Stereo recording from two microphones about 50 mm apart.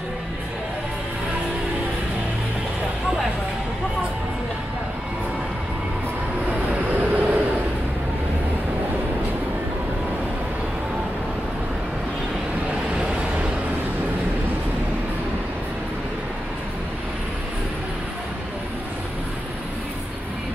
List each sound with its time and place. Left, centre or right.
6.7 s vehicle: right
12.9 s vehicle: centre